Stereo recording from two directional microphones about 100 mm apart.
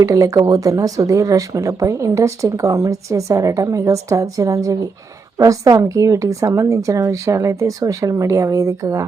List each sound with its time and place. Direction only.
0.0 s speech: 35° right (ahead or behind)